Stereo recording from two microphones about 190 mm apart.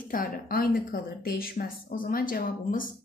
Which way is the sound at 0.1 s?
50° left (ahead or behind).